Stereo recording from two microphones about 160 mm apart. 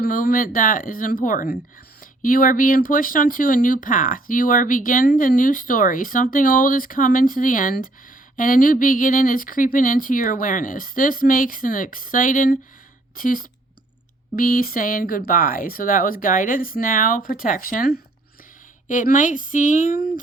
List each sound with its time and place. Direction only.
0.0 s speech: 60° left (ahead or behind)